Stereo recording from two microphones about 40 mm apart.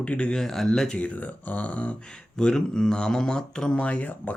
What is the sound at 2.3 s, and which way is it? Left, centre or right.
Speech, centre.